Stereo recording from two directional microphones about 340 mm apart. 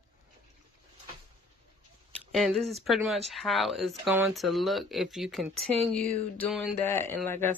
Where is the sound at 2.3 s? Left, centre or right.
Centre.